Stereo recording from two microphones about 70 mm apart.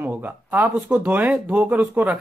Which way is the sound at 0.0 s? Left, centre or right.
Right.